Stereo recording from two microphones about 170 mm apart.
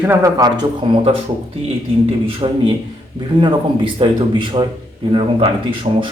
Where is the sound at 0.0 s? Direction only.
15° right (ahead or behind).